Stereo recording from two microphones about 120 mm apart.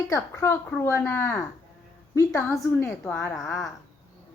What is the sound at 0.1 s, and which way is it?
A woman's voice, 25° left (ahead or behind).